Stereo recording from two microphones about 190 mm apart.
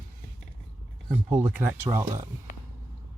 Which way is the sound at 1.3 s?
10° right (ahead or behind).